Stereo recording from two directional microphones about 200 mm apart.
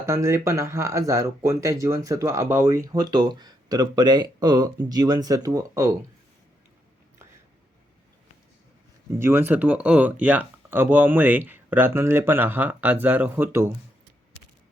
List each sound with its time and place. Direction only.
0.0 s speech: 15° right (ahead or behind)
9.1 s speech: 10° right (ahead or behind)